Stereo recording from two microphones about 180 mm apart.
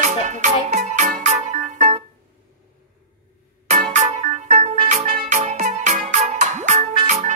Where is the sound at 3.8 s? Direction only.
40° right (ahead or behind).